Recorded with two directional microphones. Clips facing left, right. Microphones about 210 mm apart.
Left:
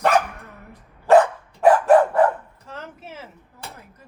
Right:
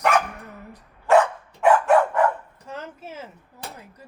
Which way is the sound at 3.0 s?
10° left (ahead or behind).